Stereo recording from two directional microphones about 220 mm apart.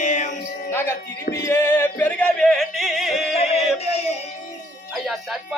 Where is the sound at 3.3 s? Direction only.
30° left (ahead or behind).